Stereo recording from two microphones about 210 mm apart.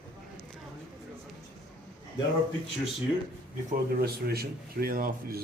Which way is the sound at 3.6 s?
45° right (ahead or behind).